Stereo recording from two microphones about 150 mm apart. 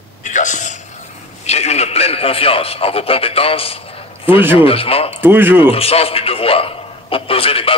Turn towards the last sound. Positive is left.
turn(degrees=40)  # may be behind; listen again after turning